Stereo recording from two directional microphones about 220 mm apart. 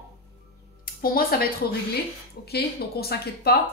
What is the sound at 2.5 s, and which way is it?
Speech, 45° left (ahead or behind).